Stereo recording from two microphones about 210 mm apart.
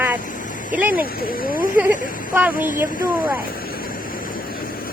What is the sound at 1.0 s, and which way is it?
Speech, 45° left (ahead or behind).